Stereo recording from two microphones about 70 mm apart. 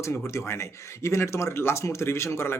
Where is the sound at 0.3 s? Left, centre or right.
Left.